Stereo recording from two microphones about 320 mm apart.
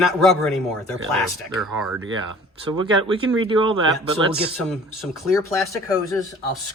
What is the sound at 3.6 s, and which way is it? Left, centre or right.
Speech, centre.